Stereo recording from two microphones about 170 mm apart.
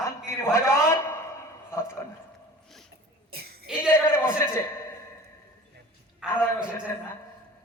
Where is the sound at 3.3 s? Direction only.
65° right (ahead or behind).